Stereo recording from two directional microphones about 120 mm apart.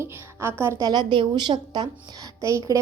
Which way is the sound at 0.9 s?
40° right (ahead or behind).